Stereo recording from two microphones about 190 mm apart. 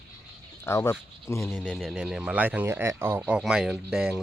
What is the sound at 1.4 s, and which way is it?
Speech, centre (ahead or behind).